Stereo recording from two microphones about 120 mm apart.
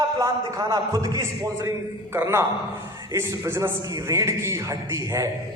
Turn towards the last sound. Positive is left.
turn(degrees=-25)  # may be behind; listen again after turning